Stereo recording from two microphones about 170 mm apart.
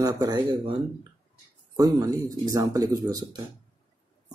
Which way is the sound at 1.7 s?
20° right (ahead or behind).